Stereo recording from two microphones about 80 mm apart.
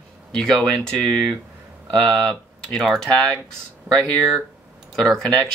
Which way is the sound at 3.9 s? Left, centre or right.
Right.